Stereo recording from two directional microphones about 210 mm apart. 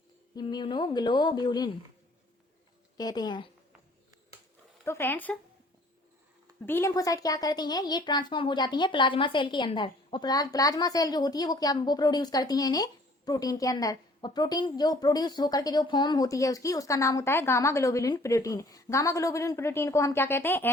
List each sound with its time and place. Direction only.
0.3 s speech: 20° left (ahead or behind)
3.0 s speech: 20° left (ahead or behind)
4.9 s speech: 10° left (ahead or behind)
6.7 s speech: 10° left (ahead or behind)